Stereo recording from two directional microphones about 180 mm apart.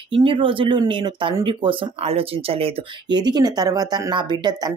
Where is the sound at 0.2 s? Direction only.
30° right (ahead or behind).